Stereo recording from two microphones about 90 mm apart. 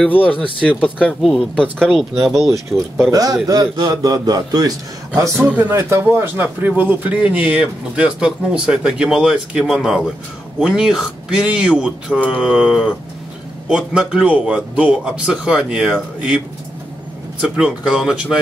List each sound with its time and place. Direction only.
0.1 s speech: 15° left (ahead or behind)
1.2 s speech: 5° left (ahead or behind)
3.1 s a man's voice: 45° right (ahead or behind)
5.5 s speech: 20° right (ahead or behind)
17.4 s speech: 10° right (ahead or behind)